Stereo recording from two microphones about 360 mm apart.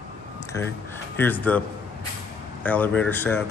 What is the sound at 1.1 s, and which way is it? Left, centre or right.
Speech, centre.